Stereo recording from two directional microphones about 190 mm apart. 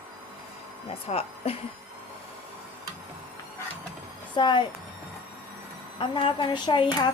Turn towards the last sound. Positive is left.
turn(degrees=25)  # may be behind; listen again after turning